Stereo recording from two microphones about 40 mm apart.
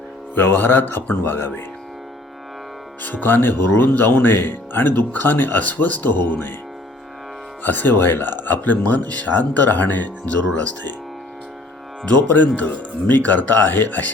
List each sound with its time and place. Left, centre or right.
0.3 s speech: left
3.0 s speech: left
5.6 s speech: left
7.6 s speech: left
10.2 s speech: left
12.3 s speech: left